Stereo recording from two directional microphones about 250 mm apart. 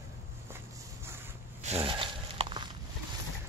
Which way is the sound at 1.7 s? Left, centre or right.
Right.